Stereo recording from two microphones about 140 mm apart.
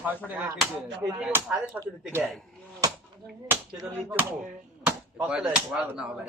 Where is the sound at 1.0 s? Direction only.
15° right (ahead or behind).